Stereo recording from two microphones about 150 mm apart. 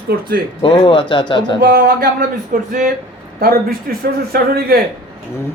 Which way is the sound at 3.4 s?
80° right.